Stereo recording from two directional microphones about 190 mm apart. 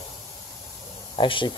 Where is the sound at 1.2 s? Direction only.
25° left (ahead or behind).